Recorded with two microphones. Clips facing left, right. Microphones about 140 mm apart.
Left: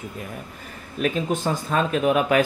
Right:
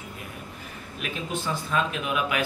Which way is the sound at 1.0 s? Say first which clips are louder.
Left 9 dB; 45° left (ahead or behind).